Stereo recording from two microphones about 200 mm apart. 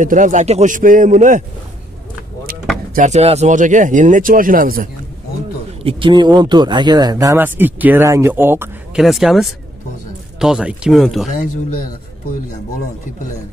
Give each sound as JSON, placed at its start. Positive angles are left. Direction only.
{"t": 0.0, "sound": "speech", "side_deg": -40}
{"t": 2.9, "sound": "speech", "side_deg": -35}
{"t": 5.9, "sound": "speech", "side_deg": -25}
{"t": 9.0, "sound": "speech", "side_deg": 0}